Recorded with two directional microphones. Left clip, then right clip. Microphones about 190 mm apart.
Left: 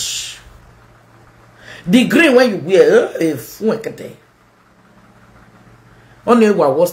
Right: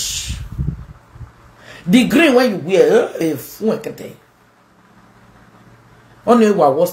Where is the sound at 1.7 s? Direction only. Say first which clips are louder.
Left 1 dB; 10° left (ahead or behind).